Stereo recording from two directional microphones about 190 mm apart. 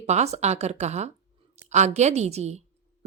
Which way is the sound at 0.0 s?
35° right (ahead or behind).